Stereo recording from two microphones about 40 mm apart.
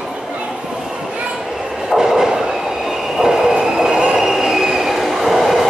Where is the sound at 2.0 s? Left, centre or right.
Centre.